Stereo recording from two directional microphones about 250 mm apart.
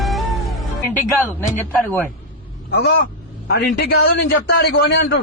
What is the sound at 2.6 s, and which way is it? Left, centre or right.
A man's voice, left.